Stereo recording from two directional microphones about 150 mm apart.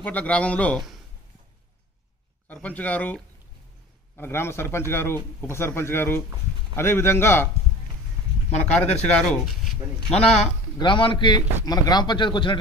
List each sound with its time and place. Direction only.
0.0 s speech: 10° left (ahead or behind)
2.4 s speech: 10° left (ahead or behind)
4.2 s speech: 15° left (ahead or behind)
8.5 s speech: 45° left (ahead or behind)
9.2 s speech: centre (ahead or behind)
10.0 s a man's voice: 45° left (ahead or behind)